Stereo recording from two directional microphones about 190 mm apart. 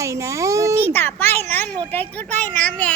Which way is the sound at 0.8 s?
10° left (ahead or behind).